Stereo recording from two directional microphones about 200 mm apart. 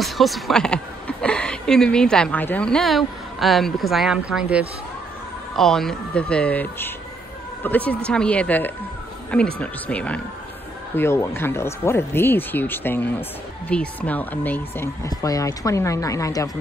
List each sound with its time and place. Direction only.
0.0 s a woman's voice: centre (ahead or behind); by 16.4 s 15° left (ahead or behind)